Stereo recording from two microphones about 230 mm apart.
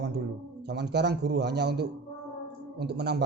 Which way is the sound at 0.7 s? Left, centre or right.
Right.